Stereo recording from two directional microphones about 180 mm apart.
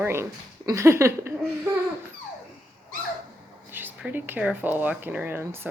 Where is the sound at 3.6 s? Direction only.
10° right (ahead or behind).